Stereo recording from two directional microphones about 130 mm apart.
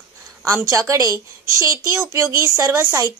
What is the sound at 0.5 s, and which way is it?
A woman's voice, 20° right (ahead or behind).